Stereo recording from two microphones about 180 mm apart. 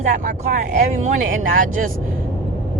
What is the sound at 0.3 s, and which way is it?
Speech, 45° right (ahead or behind).